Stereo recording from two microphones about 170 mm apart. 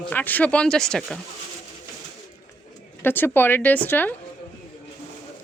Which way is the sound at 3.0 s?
10° left (ahead or behind).